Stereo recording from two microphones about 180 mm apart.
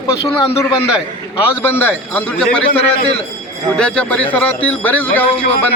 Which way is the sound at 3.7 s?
5° left (ahead or behind).